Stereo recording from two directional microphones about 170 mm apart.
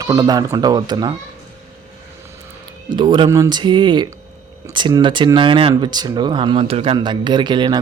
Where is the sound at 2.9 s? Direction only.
25° right (ahead or behind).